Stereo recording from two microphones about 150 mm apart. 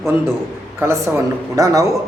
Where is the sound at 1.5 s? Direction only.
20° right (ahead or behind).